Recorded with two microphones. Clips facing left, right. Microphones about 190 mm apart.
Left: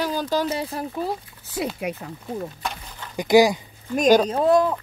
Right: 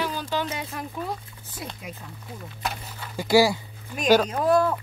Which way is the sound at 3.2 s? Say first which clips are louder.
Left 3 dB; 15° left (ahead or behind).